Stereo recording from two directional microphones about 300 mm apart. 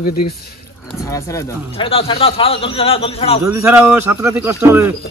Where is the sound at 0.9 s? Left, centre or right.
Centre.